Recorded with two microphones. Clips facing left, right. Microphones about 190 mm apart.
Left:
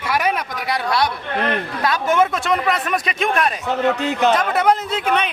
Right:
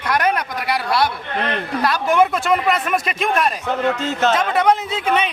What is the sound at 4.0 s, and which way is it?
Speech, 15° left (ahead or behind).